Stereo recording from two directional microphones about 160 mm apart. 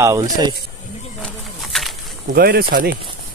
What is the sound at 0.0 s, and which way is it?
Speech, 20° right (ahead or behind).